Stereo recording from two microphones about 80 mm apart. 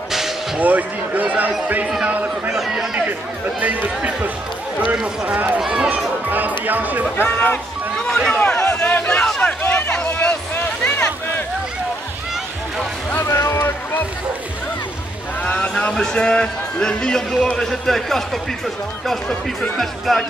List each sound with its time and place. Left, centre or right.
0.6 s speech: right
2.5 s speech: centre
3.1 s speech: right
6.6 s speech: right
7.2 s music: centre
8.6 s a sound: centre
9.6 s a sound: left
13.2 s speech: left
15.4 s a man's voice: centre
19.8 s speech: centre